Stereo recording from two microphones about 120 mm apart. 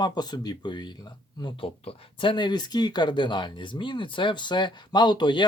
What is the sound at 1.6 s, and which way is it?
Speech, 55° left (ahead or behind).